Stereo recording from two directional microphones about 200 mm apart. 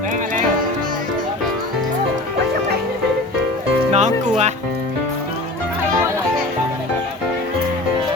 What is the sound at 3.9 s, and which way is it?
Music, 35° right (ahead or behind).